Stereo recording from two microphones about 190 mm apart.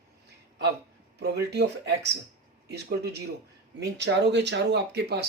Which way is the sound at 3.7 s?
65° right (ahead or behind).